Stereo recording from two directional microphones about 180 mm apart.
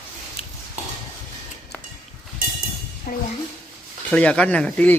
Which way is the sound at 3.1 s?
50° left (ahead or behind).